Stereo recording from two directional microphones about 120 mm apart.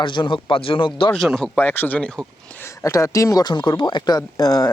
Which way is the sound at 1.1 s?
5° left (ahead or behind).